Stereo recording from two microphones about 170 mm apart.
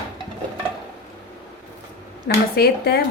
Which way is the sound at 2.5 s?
70° left (ahead or behind).